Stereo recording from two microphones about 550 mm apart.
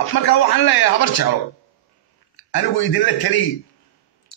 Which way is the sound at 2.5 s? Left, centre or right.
Left.